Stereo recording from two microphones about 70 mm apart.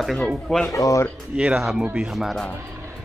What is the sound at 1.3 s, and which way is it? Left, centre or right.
Speech, centre.